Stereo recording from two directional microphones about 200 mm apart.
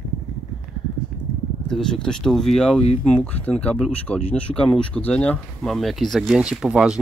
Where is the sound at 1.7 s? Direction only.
5° left (ahead or behind).